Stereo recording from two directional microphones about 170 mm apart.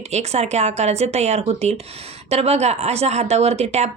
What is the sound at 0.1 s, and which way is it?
Speech, 40° right (ahead or behind).